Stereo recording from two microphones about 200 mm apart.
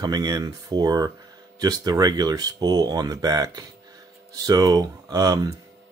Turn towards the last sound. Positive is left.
turn(degrees=-20)  # may be behind; listen again after turning